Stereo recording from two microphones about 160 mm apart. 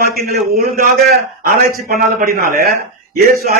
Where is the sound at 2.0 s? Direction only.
65° right (ahead or behind).